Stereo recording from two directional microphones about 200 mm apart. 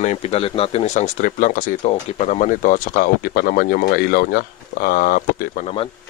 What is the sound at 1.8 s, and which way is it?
Speech, 30° left (ahead or behind).